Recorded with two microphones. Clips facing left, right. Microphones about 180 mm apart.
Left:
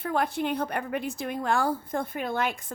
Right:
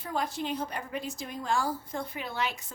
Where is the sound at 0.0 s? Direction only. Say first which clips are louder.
Left 5 dB; 60° left (ahead or behind).